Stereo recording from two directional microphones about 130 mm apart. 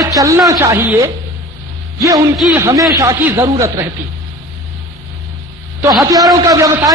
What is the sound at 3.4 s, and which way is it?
Speech, 20° right (ahead or behind).